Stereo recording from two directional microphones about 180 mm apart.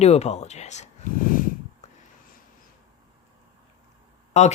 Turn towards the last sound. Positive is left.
turn(degrees=40)  # may be behind; listen again after turning